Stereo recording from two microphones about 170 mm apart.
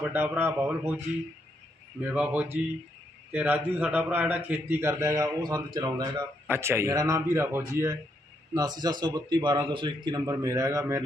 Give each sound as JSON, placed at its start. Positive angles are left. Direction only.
{"t": 0.0, "sound": "a man's voice", "side_deg": -10}
{"t": 2.0, "sound": "a man's voice", "side_deg": -10}